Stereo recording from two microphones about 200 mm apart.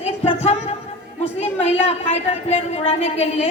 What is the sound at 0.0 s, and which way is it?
A woman's voice, 30° left (ahead or behind).